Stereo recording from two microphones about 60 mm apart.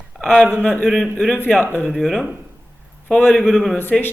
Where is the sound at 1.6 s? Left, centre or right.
Left.